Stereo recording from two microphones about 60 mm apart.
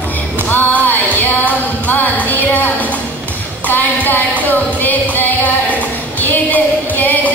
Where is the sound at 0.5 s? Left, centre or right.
Left.